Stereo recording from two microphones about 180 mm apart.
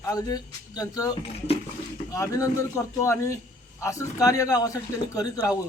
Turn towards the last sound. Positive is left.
turn(degrees=20)  # may be behind; listen again after turning